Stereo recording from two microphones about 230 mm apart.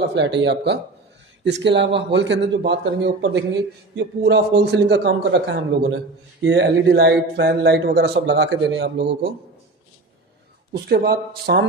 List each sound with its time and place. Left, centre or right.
0.0 s speech: right
10.7 s speech: right